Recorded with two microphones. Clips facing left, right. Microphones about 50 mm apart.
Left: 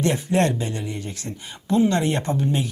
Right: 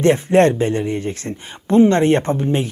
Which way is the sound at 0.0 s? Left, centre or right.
Right.